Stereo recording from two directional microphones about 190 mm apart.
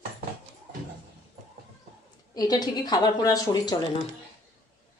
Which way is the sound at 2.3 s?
20° left (ahead or behind).